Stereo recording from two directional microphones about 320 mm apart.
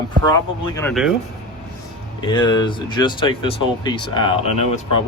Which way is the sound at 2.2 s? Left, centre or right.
Centre.